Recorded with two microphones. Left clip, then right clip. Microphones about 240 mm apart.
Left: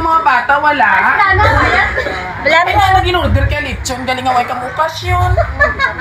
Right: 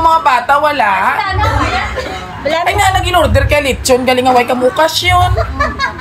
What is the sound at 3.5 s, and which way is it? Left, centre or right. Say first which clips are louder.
Speech: right 8 dB; right.